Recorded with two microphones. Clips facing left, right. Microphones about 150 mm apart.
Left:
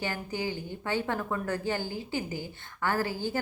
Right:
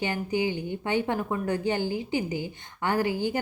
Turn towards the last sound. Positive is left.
turn(degrees=-15)  # may be behind; listen again after turning